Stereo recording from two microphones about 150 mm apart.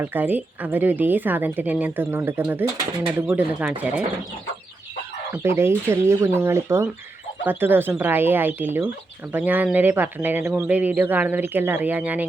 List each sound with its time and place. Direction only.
0.0 s a woman's voice: 10° right (ahead or behind)
5.3 s a woman's voice: 15° right (ahead or behind)